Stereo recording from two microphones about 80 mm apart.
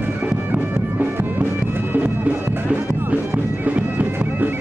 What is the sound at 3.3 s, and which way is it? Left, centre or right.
Bagpipes, right.